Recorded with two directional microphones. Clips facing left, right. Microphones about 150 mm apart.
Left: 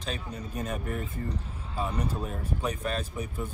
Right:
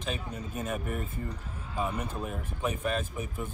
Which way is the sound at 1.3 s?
35° left (ahead or behind).